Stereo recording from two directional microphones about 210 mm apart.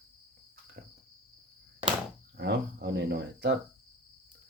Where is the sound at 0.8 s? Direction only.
45° right (ahead or behind).